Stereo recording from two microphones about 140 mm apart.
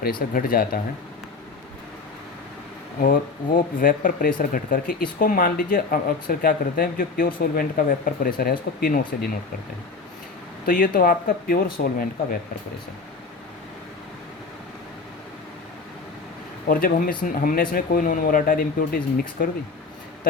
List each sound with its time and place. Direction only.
0.0 s speech: 90° left
3.0 s speech: 85° left
10.7 s speech: 85° left
16.6 s speech: 90° left